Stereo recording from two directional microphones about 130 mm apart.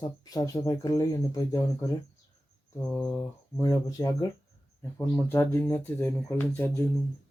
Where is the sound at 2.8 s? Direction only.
15° left (ahead or behind).